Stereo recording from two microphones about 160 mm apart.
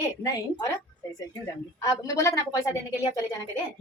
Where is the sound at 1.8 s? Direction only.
20° left (ahead or behind).